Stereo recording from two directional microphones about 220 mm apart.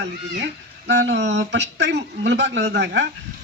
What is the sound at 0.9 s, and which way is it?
Speech, 50° right (ahead or behind).